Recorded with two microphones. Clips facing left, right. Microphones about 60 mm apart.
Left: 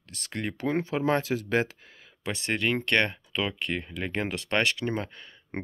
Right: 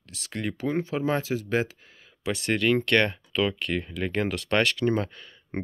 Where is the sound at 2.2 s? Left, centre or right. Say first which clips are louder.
Right 4 dB; left.